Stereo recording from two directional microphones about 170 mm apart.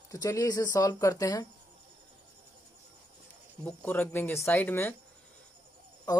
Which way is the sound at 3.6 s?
10° left (ahead or behind).